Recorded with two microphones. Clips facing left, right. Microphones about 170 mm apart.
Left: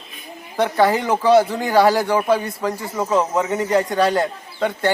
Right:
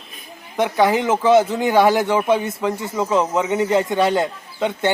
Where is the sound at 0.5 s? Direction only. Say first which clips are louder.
Even; 15° right (ahead or behind).